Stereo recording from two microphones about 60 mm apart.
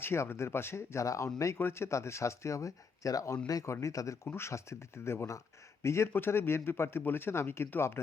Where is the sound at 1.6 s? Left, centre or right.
Left.